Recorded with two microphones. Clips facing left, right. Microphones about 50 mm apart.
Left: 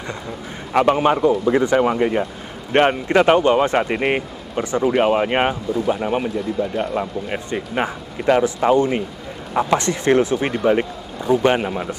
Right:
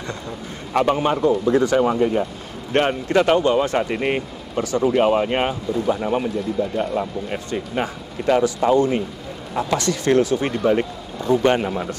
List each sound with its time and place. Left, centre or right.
0.7 s speech: left